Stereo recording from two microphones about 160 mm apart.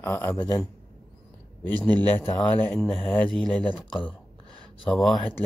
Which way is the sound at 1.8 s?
25° right (ahead or behind).